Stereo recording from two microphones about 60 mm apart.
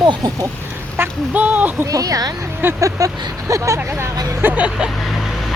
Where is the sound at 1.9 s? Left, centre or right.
Right.